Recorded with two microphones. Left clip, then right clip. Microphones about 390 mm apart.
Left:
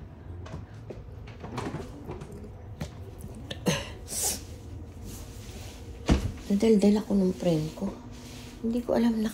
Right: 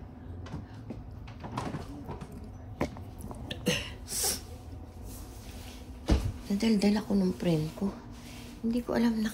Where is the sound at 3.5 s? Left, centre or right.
Centre.